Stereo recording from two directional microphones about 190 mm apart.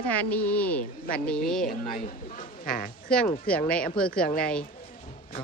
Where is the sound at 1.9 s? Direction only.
45° left (ahead or behind).